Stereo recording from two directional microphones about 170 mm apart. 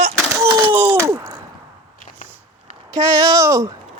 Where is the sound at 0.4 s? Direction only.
25° right (ahead or behind).